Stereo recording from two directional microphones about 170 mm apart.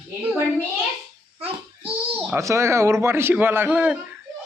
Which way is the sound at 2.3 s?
15° right (ahead or behind).